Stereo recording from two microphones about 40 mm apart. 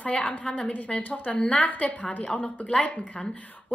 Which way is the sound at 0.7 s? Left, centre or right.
Left.